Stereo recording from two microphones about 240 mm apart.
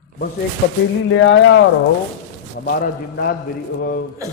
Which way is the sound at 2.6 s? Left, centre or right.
Left.